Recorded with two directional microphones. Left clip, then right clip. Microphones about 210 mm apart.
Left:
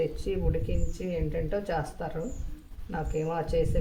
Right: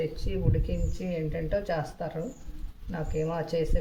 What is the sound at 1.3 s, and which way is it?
Speech, 25° left (ahead or behind).